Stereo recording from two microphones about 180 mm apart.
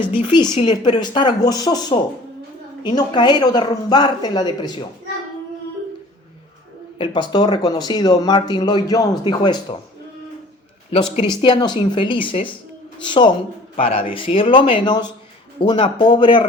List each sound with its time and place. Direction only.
0.2 s speech: 25° left (ahead or behind)
7.0 s speech: 25° left (ahead or behind)
10.9 s speech: 25° left (ahead or behind)